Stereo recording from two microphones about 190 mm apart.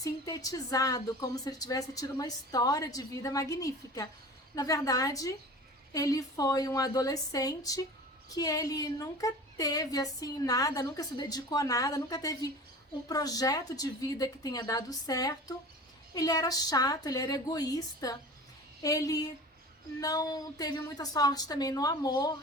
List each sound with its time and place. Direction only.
0.0 s a woman's voice: 20° left (ahead or behind)